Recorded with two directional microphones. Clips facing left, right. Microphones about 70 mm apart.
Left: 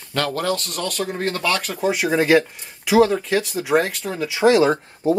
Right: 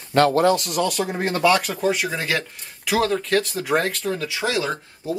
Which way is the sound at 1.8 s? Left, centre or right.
Centre.